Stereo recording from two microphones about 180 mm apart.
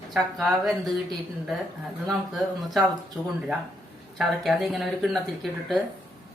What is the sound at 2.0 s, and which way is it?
Speech, centre (ahead or behind).